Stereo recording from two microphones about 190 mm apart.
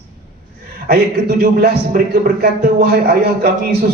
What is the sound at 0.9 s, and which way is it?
A man's voice, 55° right (ahead or behind).